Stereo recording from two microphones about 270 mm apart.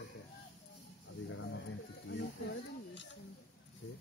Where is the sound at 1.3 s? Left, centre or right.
Left.